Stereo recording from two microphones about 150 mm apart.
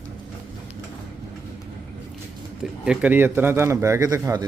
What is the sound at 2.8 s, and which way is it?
Speech, 5° right (ahead or behind).